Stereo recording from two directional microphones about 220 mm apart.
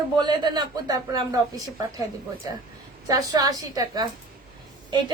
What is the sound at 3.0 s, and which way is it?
A woman's voice, 15° right (ahead or behind).